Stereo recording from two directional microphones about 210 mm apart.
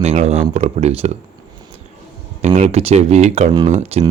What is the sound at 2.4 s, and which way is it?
Speech, 30° right (ahead or behind).